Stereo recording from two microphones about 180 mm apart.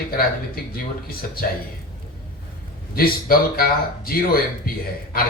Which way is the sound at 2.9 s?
55° left (ahead or behind).